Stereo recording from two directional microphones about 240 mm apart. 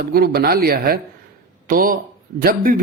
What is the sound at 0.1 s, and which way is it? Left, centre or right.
Speech, right.